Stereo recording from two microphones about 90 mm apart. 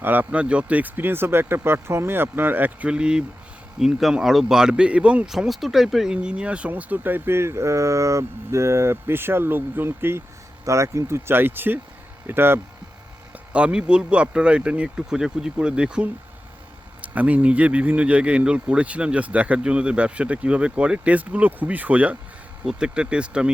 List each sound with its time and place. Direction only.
0.0 s speech: 20° right (ahead or behind)
13.5 s speech: 10° right (ahead or behind)